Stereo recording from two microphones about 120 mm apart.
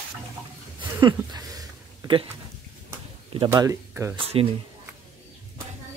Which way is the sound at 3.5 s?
25° right (ahead or behind).